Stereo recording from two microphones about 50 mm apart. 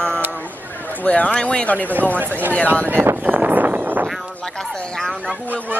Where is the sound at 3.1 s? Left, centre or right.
Right.